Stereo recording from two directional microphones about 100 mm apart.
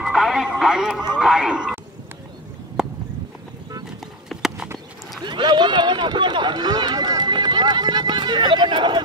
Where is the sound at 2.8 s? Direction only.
5° right (ahead or behind).